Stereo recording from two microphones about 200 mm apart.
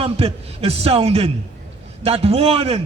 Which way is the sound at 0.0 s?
30° right (ahead or behind).